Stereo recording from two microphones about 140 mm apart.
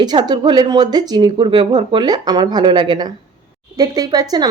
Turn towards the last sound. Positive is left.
turn(degrees=-30)  # may be behind; listen again after turning